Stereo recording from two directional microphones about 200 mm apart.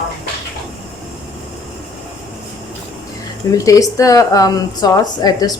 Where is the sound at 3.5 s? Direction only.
15° left (ahead or behind).